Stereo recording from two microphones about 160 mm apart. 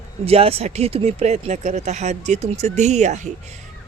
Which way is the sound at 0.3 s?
40° right (ahead or behind).